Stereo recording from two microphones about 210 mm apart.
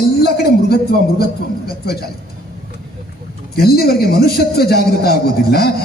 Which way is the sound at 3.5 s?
45° left (ahead or behind).